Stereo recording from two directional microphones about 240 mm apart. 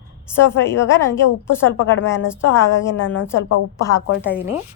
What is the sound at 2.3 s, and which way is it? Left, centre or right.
Speech, centre.